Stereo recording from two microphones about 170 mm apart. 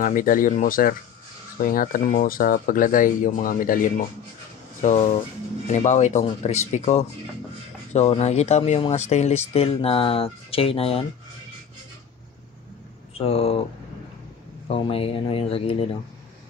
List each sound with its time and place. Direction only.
0.0 s speech: 55° left (ahead or behind)
4.8 s speech: 45° left (ahead or behind)
13.1 s speech: 35° left (ahead or behind)
14.7 s speech: 35° left (ahead or behind)